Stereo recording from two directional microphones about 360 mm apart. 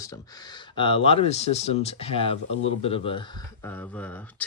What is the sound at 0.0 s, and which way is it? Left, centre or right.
Speech, centre.